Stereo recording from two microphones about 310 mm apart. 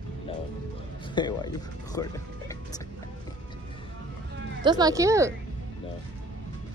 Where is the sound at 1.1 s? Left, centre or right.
Centre.